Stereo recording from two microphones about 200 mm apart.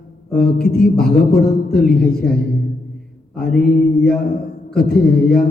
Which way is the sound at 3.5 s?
50° left (ahead or behind).